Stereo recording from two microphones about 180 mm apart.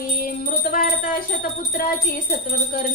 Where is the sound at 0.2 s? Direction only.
50° left (ahead or behind).